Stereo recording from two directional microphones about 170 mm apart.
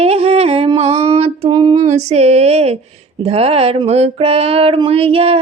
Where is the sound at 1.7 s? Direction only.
40° right (ahead or behind).